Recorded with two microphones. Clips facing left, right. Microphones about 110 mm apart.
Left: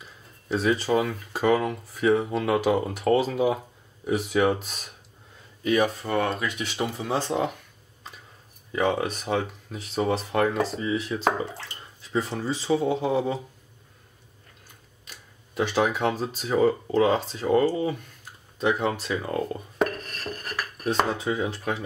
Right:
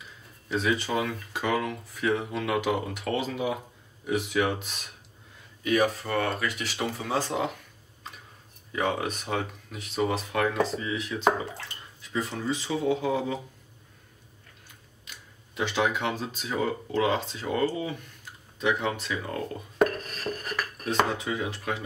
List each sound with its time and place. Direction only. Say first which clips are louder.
0.5 s speech: left 4 dB; 35° left (ahead or behind)
8.7 s speech: left 4 dB; 30° left (ahead or behind)
15.0 s speech: even; 40° left (ahead or behind)
19.8 s dishes: right 2 dB; centre (ahead or behind)
21.2 s speech: left 4 dB; 35° left (ahead or behind)